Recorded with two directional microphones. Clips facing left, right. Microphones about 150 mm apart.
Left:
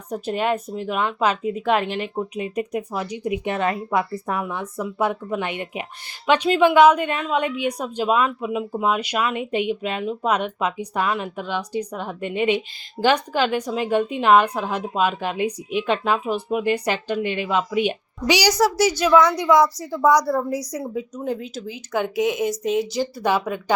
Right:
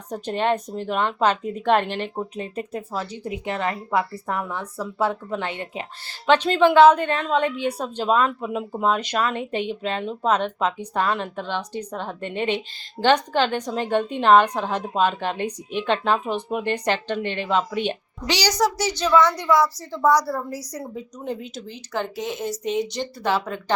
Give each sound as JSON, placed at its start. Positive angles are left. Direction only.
{"t": 0.1, "sound": "a woman's voice", "side_deg": 10}
{"t": 20.8, "sound": "speech", "side_deg": 0}
{"t": 21.9, "sound": "a woman's voice", "side_deg": 10}